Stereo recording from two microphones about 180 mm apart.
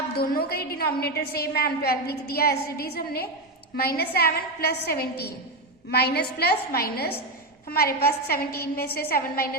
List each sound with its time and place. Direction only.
0.2 s a woman's voice: 60° left (ahead or behind)